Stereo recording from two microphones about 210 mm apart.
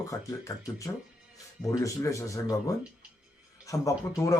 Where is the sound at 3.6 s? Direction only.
15° left (ahead or behind).